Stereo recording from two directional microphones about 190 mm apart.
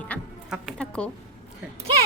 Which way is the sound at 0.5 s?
Centre (ahead or behind).